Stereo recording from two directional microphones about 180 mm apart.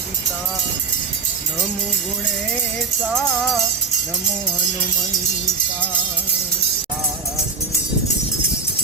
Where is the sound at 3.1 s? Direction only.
Centre (ahead or behind).